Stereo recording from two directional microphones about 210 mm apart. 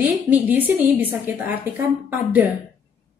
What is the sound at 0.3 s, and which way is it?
A woman's voice, 10° right (ahead or behind).